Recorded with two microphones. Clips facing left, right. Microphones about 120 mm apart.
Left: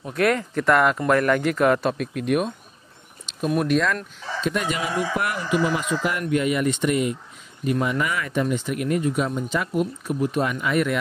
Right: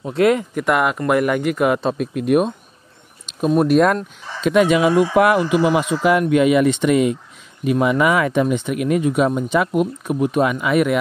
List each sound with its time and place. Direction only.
0.0 s speech: 20° right (ahead or behind)
3.5 s speech: 45° right (ahead or behind); by 11.0 s 65° right (ahead or behind)